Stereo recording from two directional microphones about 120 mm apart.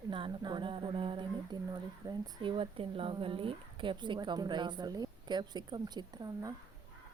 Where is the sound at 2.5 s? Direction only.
50° right (ahead or behind); by 6.5 s 30° right (ahead or behind).